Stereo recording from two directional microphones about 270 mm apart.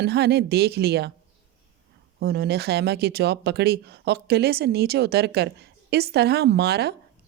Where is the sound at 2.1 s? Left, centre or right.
Right.